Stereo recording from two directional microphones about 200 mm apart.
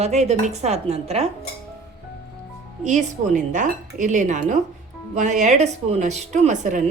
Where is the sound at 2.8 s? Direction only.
40° right (ahead or behind).